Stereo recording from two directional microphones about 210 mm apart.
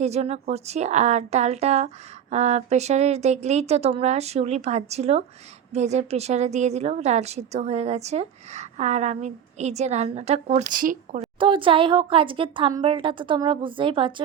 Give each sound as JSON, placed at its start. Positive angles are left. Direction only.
{"t": 0.0, "sound": "a woman's voice", "side_deg": -30}
{"t": 11.3, "sound": "speech", "side_deg": -25}